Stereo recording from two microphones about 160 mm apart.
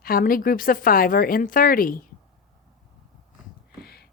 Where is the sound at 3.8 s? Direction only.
80° left.